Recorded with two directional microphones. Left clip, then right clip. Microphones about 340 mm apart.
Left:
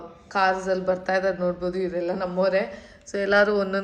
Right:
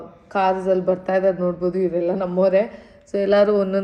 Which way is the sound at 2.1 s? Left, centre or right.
Centre.